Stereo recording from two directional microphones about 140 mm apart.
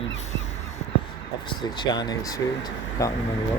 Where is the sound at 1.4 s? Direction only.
35° left (ahead or behind).